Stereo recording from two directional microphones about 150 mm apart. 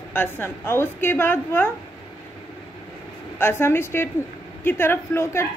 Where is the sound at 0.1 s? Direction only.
15° left (ahead or behind).